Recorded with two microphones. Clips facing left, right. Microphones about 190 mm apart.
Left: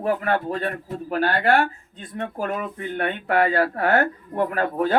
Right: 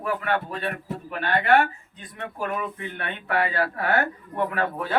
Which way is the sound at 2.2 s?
45° left (ahead or behind).